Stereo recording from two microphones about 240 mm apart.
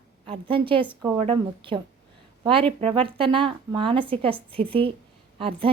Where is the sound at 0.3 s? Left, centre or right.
Right.